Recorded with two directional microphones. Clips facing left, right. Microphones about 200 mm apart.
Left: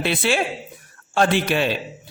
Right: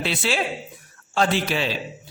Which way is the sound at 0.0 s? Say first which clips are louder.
Left 3 dB; 55° left (ahead or behind).